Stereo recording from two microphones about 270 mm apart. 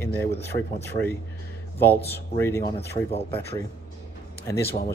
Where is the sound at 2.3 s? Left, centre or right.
Centre.